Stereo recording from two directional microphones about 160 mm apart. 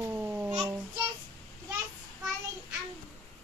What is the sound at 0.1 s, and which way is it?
Babbling, 10° right (ahead or behind).